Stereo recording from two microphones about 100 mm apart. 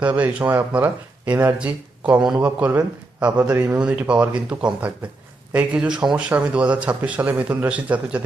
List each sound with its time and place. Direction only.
0.2 s a man's voice: 15° right (ahead or behind)
3.8 s a man's voice: 10° right (ahead or behind)